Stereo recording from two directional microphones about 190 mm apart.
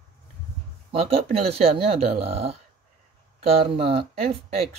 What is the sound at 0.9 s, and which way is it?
Speech, 30° right (ahead or behind).